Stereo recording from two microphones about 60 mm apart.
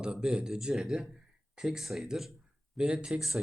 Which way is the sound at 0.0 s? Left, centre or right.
Centre.